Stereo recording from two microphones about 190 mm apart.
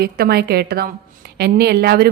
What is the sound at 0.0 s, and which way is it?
A woman's voice, 55° right (ahead or behind).